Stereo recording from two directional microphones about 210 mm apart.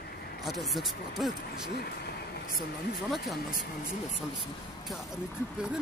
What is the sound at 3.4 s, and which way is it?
Speech, 45° left (ahead or behind).